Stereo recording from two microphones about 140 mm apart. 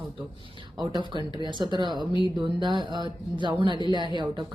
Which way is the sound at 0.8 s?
30° right (ahead or behind).